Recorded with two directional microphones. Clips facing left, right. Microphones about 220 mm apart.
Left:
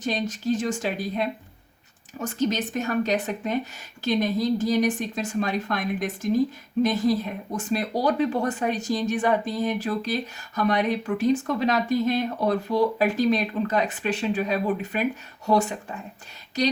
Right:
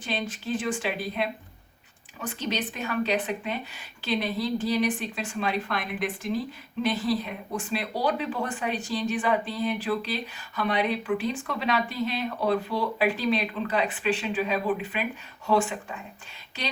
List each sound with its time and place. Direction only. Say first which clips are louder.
0.0 s speech: left 5 dB; 40° left (ahead or behind)